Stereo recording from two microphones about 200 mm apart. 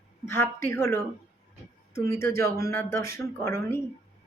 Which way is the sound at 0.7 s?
15° left (ahead or behind).